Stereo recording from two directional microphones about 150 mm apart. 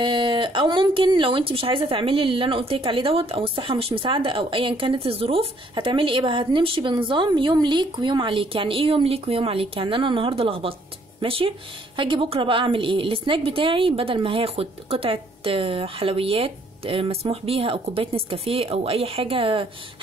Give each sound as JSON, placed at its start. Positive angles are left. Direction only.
{"t": 0.0, "sound": "speech", "side_deg": -35}